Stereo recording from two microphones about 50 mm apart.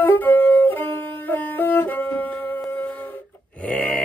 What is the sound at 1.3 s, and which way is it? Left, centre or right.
Music, left.